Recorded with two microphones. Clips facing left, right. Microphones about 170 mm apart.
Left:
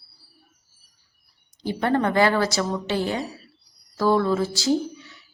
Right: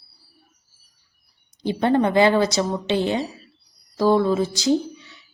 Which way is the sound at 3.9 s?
20° right (ahead or behind).